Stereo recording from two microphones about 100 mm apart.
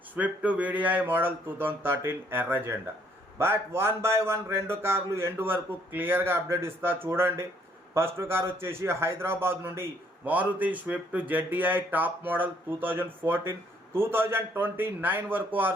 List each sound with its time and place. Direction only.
0.2 s a man's voice: 15° right (ahead or behind)